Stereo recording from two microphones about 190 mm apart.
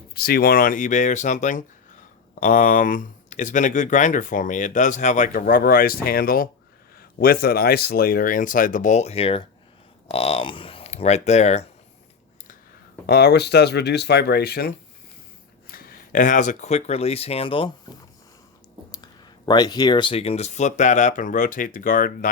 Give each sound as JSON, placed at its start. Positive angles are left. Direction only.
{"t": 0.1, "sound": "speech", "side_deg": 55}
{"t": 13.1, "sound": "speech", "side_deg": 60}
{"t": 15.7, "sound": "speech", "side_deg": 50}